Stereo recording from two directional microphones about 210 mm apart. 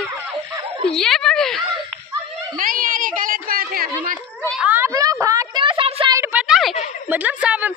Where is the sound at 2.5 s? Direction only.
40° right (ahead or behind).